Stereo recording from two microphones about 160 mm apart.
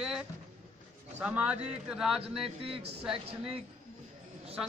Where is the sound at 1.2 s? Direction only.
5° right (ahead or behind).